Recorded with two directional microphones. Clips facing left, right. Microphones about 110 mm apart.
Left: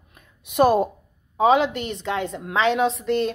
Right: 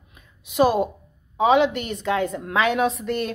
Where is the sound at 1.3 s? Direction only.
35° left (ahead or behind).